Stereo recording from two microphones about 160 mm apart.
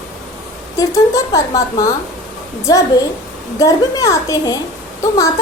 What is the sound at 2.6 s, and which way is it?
A woman's voice, 20° left (ahead or behind).